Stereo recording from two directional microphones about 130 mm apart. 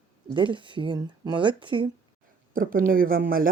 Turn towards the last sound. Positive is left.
turn(degrees=-90)